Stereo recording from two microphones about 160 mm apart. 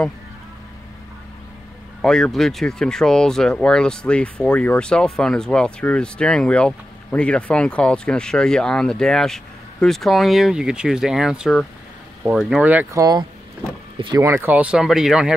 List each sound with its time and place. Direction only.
2.0 s speech: 5° left (ahead or behind)
13.9 s speech: 30° right (ahead or behind)
14.2 s speech: 15° right (ahead or behind)